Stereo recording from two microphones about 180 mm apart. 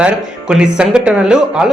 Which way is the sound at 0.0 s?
5° right (ahead or behind).